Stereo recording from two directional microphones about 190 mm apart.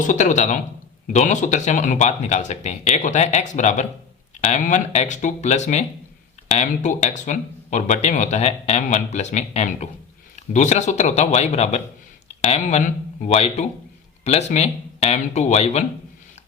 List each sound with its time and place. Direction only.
0.0 s speech: 40° left (ahead or behind)